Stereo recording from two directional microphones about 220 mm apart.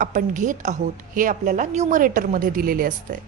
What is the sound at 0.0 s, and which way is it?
A woman's voice, 35° right (ahead or behind).